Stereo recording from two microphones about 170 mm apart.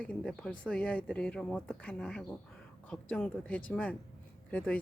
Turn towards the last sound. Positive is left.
turn(degrees=10)  # may be behind; listen again after turning